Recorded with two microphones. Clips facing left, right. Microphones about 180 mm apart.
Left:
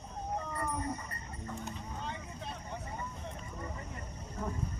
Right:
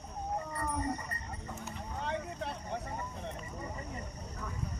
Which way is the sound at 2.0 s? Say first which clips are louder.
Right 9 dB; 65° right (ahead or behind).